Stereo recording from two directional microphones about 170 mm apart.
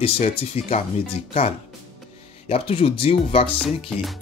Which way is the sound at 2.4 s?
35° left (ahead or behind).